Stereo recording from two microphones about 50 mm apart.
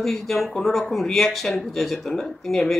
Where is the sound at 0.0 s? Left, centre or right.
Centre.